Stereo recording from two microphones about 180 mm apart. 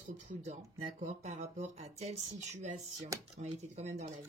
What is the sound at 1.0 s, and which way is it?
Speech, 40° right (ahead or behind).